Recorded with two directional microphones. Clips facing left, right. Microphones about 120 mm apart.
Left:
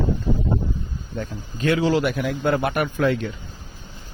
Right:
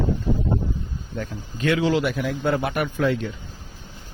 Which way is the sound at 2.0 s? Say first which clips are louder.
Left 1 dB; 55° left (ahead or behind).